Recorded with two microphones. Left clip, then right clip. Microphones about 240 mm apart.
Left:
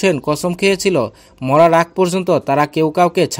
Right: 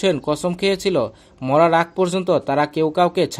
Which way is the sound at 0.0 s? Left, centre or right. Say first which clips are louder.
Left 3 dB; left.